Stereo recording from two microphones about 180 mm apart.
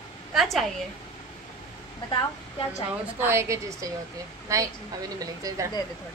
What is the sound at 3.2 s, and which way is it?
A woman's voice, 15° right (ahead or behind).